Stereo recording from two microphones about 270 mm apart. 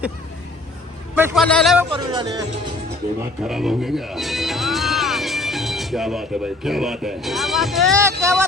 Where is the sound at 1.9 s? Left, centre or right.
Centre.